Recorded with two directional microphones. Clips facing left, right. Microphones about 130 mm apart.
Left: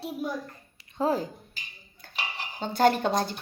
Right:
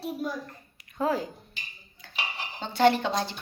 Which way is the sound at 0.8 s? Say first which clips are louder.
Left 1 dB; 30° left (ahead or behind).